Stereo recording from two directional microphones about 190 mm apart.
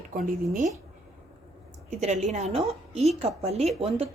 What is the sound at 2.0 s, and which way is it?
A woman's voice, 35° right (ahead or behind).